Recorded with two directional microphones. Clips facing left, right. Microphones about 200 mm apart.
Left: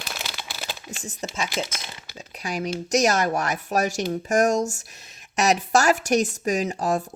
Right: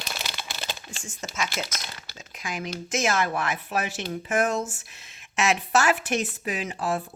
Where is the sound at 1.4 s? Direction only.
15° left (ahead or behind).